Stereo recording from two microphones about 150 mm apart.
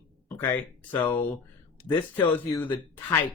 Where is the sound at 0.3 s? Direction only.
15° left (ahead or behind).